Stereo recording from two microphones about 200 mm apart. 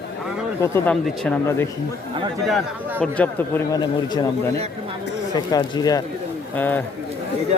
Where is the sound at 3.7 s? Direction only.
20° left (ahead or behind).